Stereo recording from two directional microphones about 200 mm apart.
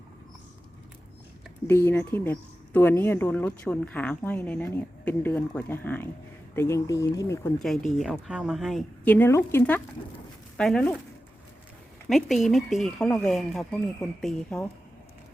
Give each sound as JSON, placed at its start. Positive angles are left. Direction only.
{"t": 1.6, "sound": "speech", "side_deg": 10}
{"t": 7.6, "sound": "speech", "side_deg": 0}
{"t": 12.0, "sound": "speech", "side_deg": 0}